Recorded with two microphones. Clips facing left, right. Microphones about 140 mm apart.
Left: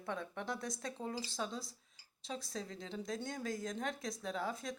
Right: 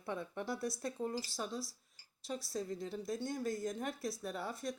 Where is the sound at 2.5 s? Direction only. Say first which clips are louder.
Right 5 dB; 90° left.